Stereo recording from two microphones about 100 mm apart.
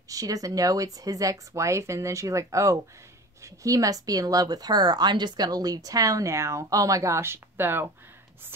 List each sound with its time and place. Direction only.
0.1 s speech: 35° right (ahead or behind)